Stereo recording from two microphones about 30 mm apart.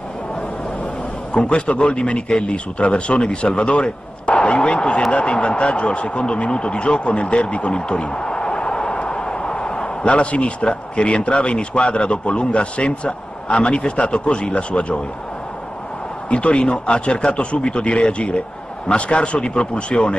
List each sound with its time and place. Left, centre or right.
1.3 s speech: left
16.3 s speech: left